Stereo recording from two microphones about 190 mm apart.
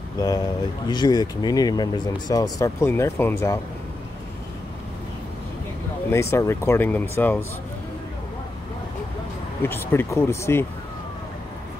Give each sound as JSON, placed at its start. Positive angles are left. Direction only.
{"t": 0.2, "sound": "speech", "side_deg": 20}
{"t": 6.0, "sound": "speech", "side_deg": 15}
{"t": 9.6, "sound": "speech", "side_deg": 10}